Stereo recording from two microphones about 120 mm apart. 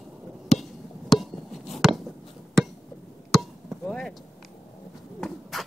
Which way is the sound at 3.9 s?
5° left (ahead or behind).